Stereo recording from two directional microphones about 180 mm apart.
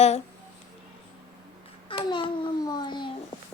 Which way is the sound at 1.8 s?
30° left (ahead or behind).